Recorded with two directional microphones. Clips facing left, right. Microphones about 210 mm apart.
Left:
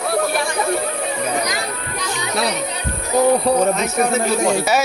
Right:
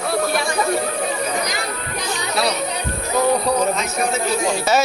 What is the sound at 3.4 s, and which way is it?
Speech, 55° left (ahead or behind).